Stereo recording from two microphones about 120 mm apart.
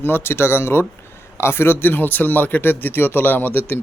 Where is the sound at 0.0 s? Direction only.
20° left (ahead or behind).